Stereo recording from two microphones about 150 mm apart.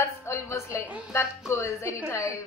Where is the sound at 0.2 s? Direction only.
20° left (ahead or behind).